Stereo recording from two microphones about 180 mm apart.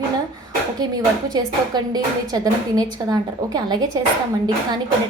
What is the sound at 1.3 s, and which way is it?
A woman's voice, 25° right (ahead or behind).